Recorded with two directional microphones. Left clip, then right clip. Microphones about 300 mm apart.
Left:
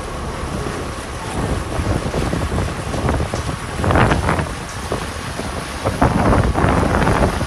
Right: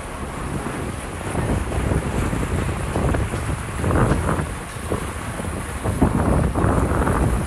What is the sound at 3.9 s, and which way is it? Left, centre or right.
Vehicle, left.